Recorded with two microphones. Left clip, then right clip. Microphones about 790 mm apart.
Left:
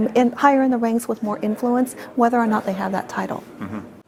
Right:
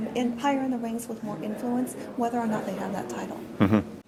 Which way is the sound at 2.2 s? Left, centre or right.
Left.